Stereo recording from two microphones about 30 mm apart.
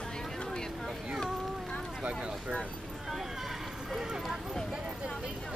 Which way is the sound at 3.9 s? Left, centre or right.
Right.